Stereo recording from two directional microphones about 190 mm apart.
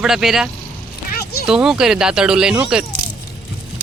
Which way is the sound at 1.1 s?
55° left (ahead or behind).